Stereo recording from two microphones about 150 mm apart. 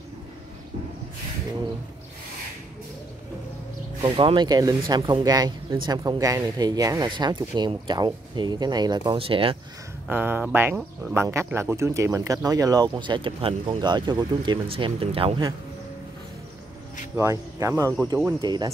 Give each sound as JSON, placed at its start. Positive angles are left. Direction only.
{"t": 4.0, "sound": "speech", "side_deg": -35}
{"t": 10.0, "sound": "speech", "side_deg": -15}
{"t": 17.1, "sound": "speech", "side_deg": -20}